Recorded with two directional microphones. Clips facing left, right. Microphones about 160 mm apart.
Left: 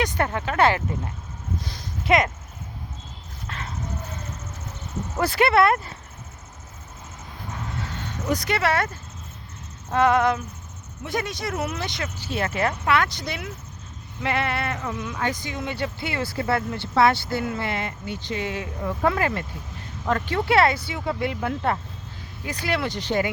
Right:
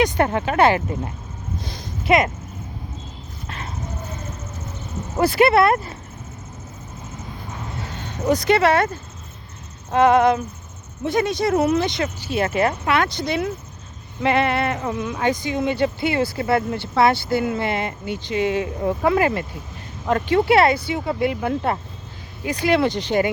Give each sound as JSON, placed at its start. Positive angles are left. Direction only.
{"t": 0.0, "sound": "speech", "side_deg": -20}
{"t": 1.5, "sound": "a sound", "side_deg": -20}
{"t": 3.4, "sound": "dog", "side_deg": -15}
{"t": 5.1, "sound": "speech", "side_deg": -10}
{"t": 5.6, "sound": "speech", "side_deg": -40}
{"t": 7.8, "sound": "speech", "side_deg": -15}
{"t": 9.9, "sound": "speech", "side_deg": -20}